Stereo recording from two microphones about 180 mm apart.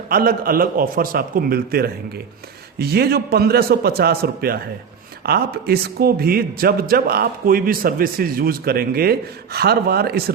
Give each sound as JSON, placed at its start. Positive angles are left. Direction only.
{"t": 0.1, "sound": "a man's voice", "side_deg": -55}